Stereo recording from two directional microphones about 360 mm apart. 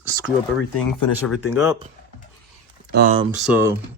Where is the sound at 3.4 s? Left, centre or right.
Centre.